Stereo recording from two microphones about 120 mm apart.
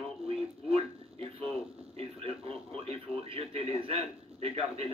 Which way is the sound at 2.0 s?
55° right (ahead or behind).